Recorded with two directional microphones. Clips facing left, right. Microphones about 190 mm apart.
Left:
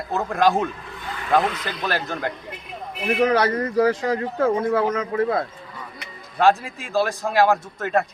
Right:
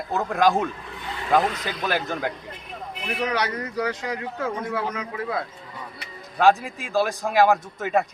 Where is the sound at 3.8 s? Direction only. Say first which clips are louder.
Left 8 dB; 30° left (ahead or behind).